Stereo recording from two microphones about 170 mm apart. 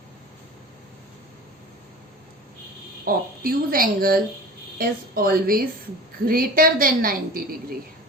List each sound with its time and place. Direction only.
3.0 s a woman's voice: 60° right (ahead or behind)